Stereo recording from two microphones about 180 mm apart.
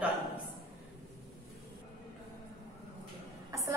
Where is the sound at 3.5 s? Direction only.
15° right (ahead or behind).